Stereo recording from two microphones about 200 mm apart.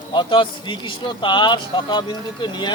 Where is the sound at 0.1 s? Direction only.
25° left (ahead or behind).